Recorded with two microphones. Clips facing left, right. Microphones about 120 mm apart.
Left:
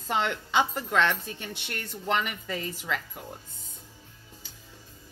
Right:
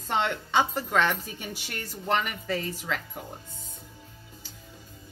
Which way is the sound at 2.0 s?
35° right (ahead or behind).